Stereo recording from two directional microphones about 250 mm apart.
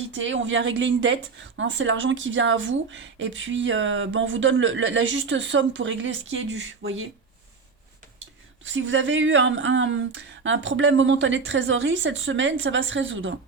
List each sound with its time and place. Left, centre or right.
0.1 s a woman's voice: right
8.6 s a woman's voice: right